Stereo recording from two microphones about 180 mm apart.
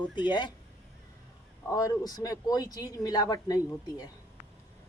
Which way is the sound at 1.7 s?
20° left (ahead or behind).